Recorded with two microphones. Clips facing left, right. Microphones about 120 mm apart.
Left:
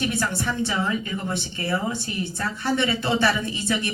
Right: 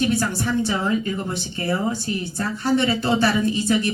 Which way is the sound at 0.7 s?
30° right (ahead or behind).